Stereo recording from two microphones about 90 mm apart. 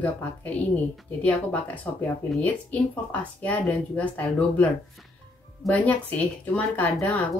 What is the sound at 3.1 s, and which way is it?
Speech, 15° left (ahead or behind).